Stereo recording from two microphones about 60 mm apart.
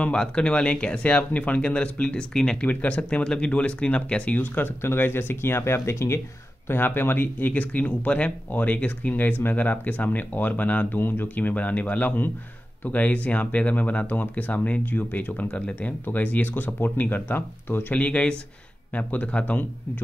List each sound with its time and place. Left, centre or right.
0.0 s speech: centre
2.6 s speech: left
6.7 s speech: left
17.9 s speech: left